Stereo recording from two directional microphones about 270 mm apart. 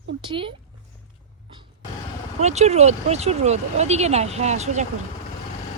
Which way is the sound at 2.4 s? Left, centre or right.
Right.